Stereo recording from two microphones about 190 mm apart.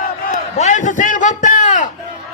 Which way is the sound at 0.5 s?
40° left (ahead or behind).